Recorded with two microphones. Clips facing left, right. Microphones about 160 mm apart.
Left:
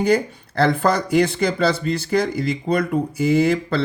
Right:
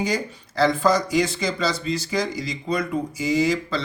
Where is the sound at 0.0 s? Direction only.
55° left (ahead or behind).